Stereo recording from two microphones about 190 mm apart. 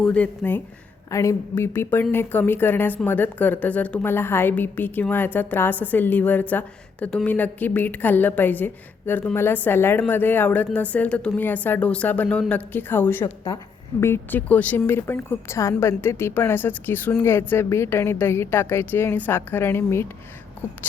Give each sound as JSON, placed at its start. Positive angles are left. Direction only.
{"t": 0.0, "sound": "a woman's voice", "side_deg": 5}
{"t": 13.2, "sound": "a woman's voice", "side_deg": 25}
{"t": 14.0, "sound": "a woman's voice", "side_deg": 10}